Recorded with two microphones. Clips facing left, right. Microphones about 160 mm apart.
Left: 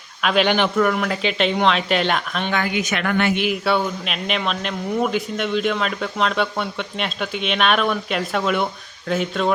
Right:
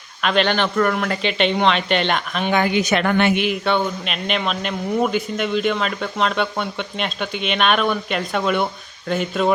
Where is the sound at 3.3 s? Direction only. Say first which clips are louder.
Right 1 dB; 5° left (ahead or behind).